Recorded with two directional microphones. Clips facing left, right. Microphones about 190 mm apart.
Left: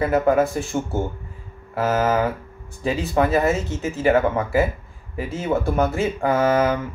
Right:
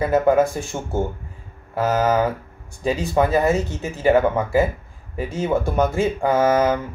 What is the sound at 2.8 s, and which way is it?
Speech, 15° right (ahead or behind).